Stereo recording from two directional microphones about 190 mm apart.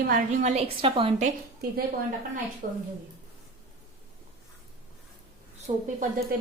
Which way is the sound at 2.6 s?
50° right (ahead or behind).